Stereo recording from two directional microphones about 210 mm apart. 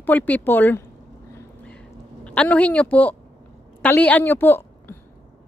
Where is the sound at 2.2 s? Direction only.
5° left (ahead or behind).